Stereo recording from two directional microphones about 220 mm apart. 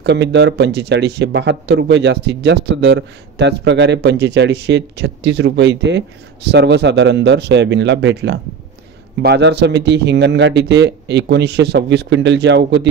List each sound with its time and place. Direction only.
0.0 s speech: 50° right (ahead or behind)